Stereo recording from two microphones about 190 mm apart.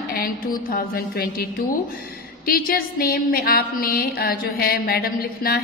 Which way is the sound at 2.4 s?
50° left (ahead or behind).